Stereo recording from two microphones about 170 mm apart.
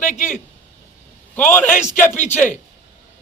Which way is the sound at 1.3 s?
10° left (ahead or behind).